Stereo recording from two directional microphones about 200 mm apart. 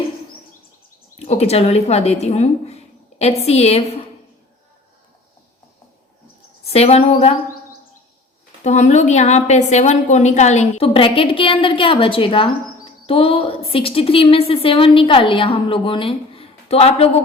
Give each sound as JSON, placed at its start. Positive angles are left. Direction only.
{"t": 1.2, "sound": "a woman's voice", "side_deg": 30}
{"t": 6.7, "sound": "a woman's voice", "side_deg": 30}
{"t": 8.6, "sound": "a woman's voice", "side_deg": 35}